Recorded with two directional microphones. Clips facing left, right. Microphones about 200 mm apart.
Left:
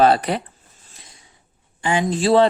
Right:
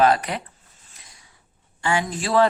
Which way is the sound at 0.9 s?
25° left (ahead or behind).